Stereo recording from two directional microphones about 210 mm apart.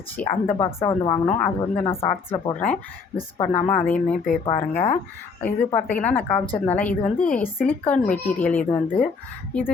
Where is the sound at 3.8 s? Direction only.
5° left (ahead or behind).